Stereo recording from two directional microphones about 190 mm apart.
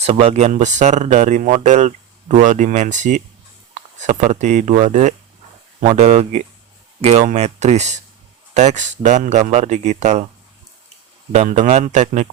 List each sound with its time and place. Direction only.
0.0 s speech: 35° right (ahead or behind)
11.3 s speech: 40° right (ahead or behind)